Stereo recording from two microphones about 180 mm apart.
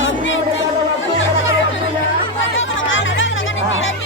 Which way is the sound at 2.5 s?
90° left.